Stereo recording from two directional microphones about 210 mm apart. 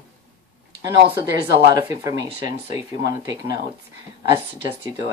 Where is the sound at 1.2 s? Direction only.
15° right (ahead or behind).